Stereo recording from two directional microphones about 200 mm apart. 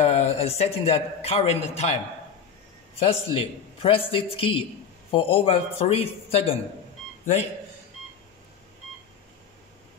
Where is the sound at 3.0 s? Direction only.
30° left (ahead or behind).